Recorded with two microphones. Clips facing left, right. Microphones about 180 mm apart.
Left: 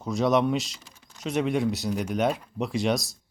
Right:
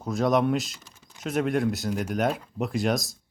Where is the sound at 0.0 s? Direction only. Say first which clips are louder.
Even; centre (ahead or behind).